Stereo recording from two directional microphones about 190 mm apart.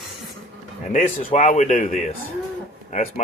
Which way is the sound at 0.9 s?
40° left (ahead or behind).